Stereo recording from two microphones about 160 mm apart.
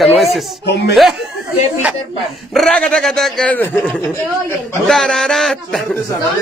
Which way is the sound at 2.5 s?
5° left (ahead or behind).